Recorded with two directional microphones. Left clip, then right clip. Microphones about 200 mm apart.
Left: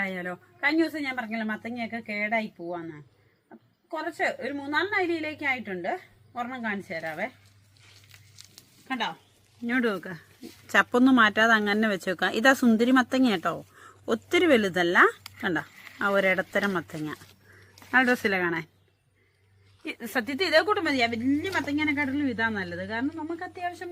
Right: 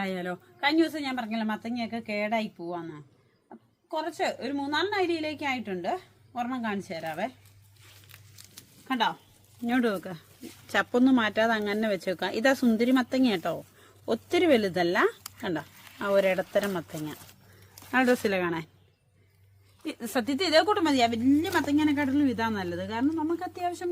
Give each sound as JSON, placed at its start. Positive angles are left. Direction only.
{"t": 0.0, "sound": "a woman's voice", "side_deg": 0}
{"t": 8.9, "sound": "speech", "side_deg": -30}
{"t": 9.6, "sound": "speech", "side_deg": 5}
{"t": 10.7, "sound": "speech", "side_deg": 25}
{"t": 17.9, "sound": "speech", "side_deg": 10}
{"t": 20.1, "sound": "speech", "side_deg": -10}